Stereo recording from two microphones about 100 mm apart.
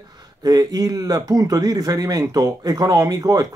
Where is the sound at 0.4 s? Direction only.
40° right (ahead or behind).